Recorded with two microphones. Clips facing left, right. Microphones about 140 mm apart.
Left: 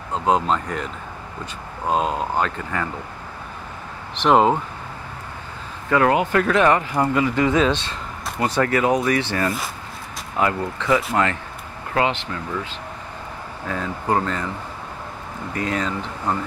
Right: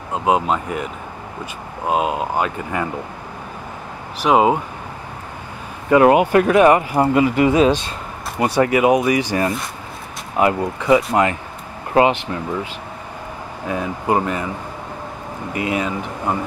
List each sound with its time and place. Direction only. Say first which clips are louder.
0.1 s speech: right 2 dB; 10° right (ahead or behind)
4.2 s speech: right 1 dB; 5° right (ahead or behind)
5.9 s speech: right 6 dB; 20° right (ahead or behind)
13.7 s speech: right 3 dB; 15° right (ahead or behind)
15.5 s speech: right 3 dB; 10° right (ahead or behind)